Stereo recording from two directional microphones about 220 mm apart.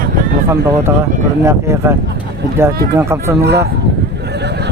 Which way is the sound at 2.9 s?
10° right (ahead or behind).